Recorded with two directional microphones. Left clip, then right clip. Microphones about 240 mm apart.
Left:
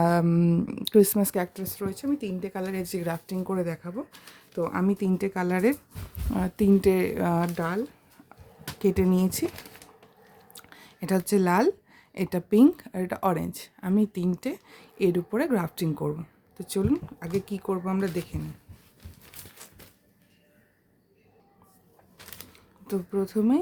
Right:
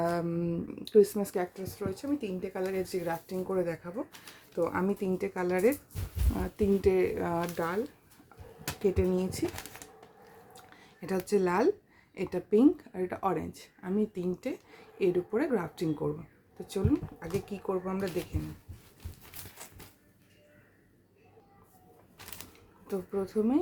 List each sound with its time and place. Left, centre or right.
0.0 s speech: left
8.8 s speech: left
10.5 s a sound: left
12.1 s speech: left
22.9 s speech: left